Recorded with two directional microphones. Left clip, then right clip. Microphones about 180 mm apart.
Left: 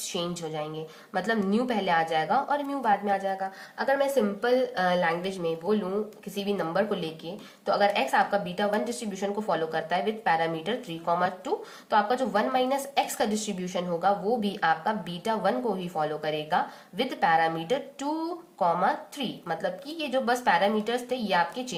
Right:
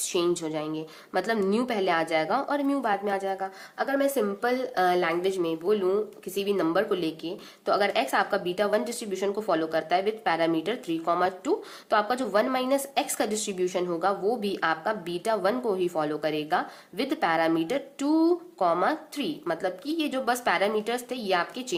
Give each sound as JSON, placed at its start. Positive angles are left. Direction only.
{"t": 0.0, "sound": "speech", "side_deg": -35}